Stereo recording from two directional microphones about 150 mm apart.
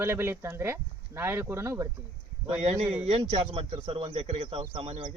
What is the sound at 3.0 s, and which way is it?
Speech, 40° right (ahead or behind).